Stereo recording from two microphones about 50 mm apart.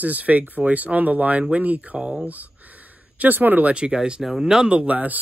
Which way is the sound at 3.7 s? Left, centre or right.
Centre.